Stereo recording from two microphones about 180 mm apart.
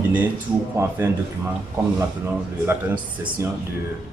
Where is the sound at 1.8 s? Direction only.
15° right (ahead or behind).